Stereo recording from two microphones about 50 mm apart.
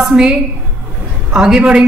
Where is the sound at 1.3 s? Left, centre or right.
Centre.